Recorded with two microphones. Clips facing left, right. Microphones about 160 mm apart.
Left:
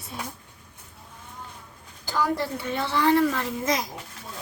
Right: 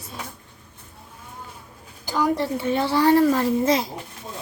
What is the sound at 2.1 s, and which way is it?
A child's voice, 15° right (ahead or behind).